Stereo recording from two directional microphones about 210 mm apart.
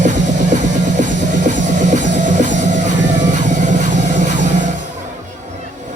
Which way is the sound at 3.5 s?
35° right (ahead or behind).